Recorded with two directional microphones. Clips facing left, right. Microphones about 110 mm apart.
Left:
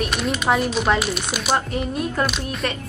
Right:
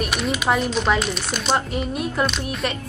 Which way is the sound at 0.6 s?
5° left (ahead or behind).